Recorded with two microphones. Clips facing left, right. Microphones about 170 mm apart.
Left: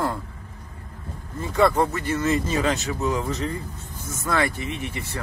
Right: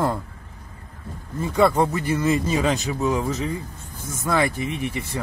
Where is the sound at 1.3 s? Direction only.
10° right (ahead or behind).